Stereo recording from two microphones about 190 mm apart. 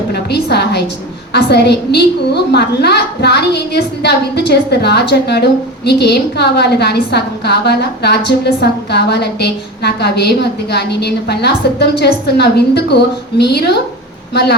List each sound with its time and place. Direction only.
0.1 s a woman's voice: 60° left (ahead or behind)